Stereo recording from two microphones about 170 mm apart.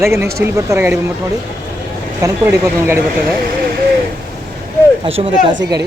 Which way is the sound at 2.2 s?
15° right (ahead or behind).